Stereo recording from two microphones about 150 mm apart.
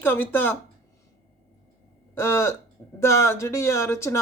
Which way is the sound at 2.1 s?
15° left (ahead or behind).